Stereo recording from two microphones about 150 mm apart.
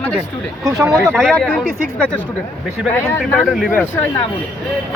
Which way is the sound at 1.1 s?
5° left (ahead or behind).